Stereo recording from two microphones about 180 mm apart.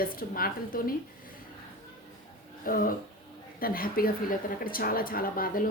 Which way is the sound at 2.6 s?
50° left (ahead or behind).